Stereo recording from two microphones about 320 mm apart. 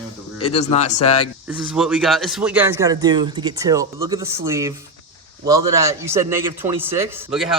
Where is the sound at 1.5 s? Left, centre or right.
Centre.